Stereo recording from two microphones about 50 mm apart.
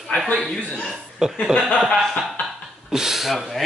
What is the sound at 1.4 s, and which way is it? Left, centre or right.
Speech, left.